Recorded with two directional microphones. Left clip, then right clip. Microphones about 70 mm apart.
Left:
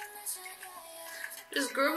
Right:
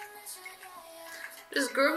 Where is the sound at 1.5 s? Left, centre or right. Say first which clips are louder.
Right 3 dB; centre.